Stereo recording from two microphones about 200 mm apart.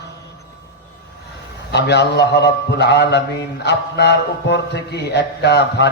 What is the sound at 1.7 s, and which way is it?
A man's voice, 55° left (ahead or behind).